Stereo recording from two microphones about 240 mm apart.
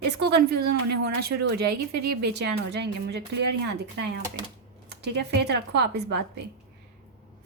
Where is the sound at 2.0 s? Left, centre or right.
Right.